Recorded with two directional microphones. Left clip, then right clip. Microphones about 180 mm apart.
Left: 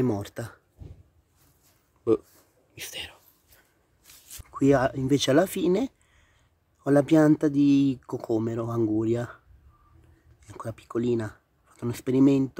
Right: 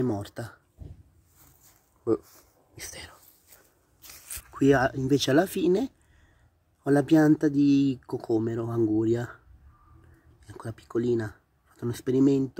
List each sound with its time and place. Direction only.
0.0 s speech: 15° left (ahead or behind)
2.7 s speech: 20° left (ahead or behind)
4.1 s a sound: 45° right (ahead or behind)
4.5 s speech: 10° left (ahead or behind)
10.4 s speech: 10° left (ahead or behind)